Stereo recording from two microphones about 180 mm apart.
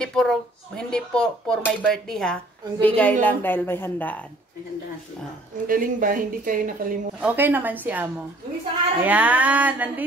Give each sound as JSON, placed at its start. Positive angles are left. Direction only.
{"t": 0.0, "sound": "a woman's voice", "side_deg": 5}
{"t": 5.7, "sound": "speech", "side_deg": -50}
{"t": 7.2, "sound": "speech", "side_deg": -10}